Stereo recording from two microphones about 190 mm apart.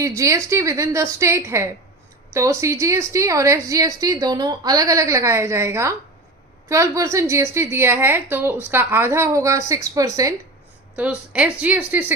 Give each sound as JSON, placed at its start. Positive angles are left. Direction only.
{"t": 0.2, "sound": "a woman's voice", "side_deg": -15}
{"t": 11.3, "sound": "a woman's voice", "side_deg": -5}